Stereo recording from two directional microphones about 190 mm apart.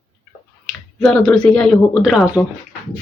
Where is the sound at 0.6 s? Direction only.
5° left (ahead or behind).